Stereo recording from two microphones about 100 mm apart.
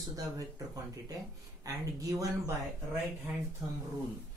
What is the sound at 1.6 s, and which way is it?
Speech, 35° right (ahead or behind).